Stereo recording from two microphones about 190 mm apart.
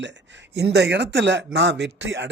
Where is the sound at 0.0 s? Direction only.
70° right (ahead or behind).